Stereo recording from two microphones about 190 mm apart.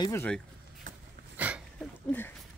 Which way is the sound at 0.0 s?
15° left (ahead or behind).